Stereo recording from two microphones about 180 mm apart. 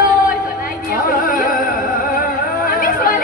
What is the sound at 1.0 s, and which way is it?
Music, 50° left (ahead or behind).